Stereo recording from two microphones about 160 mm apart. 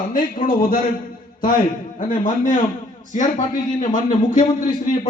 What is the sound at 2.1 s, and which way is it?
Speech, 55° left (ahead or behind).